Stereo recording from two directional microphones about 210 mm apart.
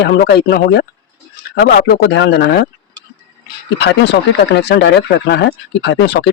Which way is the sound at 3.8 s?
55° left (ahead or behind).